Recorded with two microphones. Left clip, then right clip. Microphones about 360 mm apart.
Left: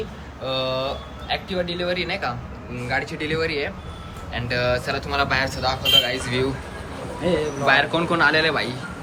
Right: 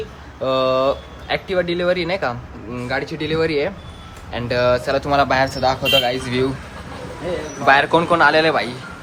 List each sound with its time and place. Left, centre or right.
0.4 s speech: centre
7.6 s speech: centre